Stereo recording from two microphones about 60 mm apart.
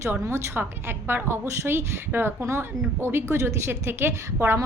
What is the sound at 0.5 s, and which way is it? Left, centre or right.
A woman's voice, right.